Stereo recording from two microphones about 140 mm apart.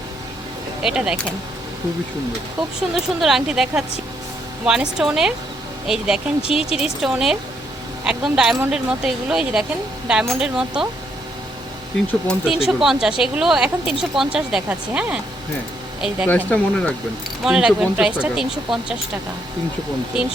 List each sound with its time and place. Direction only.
0.8 s speech: 5° right (ahead or behind)
2.9 s speech: centre (ahead or behind)
12.3 s speech: 5° right (ahead or behind)
16.3 s speech: 10° left (ahead or behind)
17.4 s speech: 5° right (ahead or behind)
20.1 s speech: 40° left (ahead or behind)